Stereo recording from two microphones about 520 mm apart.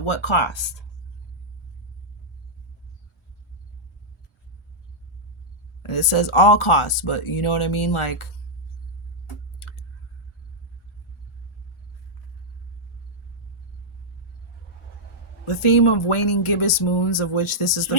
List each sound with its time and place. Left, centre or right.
0.0 s speech: left
5.8 s speech: left
15.4 s speech: left